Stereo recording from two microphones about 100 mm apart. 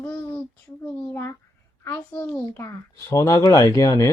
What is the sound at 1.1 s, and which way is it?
Speech, 25° left (ahead or behind).